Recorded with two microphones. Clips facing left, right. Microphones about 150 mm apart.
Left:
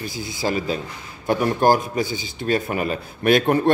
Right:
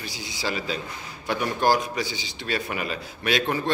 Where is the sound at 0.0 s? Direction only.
50° left (ahead or behind).